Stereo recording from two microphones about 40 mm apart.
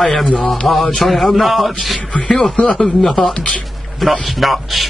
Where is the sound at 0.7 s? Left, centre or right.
Centre.